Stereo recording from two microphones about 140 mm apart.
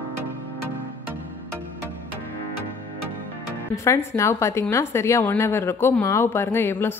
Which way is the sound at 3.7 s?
20° left (ahead or behind).